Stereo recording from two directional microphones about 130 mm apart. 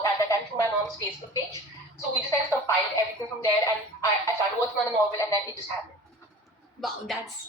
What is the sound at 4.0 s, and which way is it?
Speech, 25° left (ahead or behind).